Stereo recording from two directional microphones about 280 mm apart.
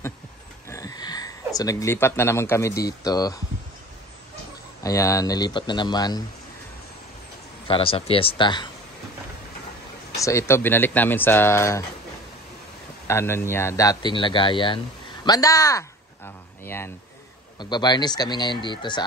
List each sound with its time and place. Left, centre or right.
0.7 s a sound: centre
2.8 s speech: centre
4.8 s speech: centre
7.6 s speech: centre
10.1 s speech: centre
13.0 s speech: centre